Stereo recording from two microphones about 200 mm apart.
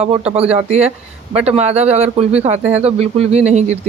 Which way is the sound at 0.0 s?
30° right (ahead or behind).